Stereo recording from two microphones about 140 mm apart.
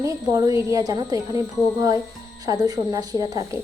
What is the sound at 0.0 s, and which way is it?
A woman's voice, 25° right (ahead or behind).